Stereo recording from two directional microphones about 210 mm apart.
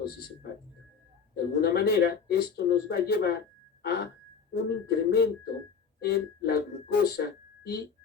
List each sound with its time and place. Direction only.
1.4 s speech: 50° left (ahead or behind)